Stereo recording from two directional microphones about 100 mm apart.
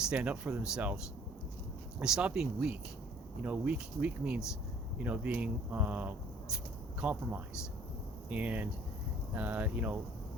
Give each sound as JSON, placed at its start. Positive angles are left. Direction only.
{"t": 0.1, "sound": "speech", "side_deg": -10}
{"t": 2.0, "sound": "speech", "side_deg": -5}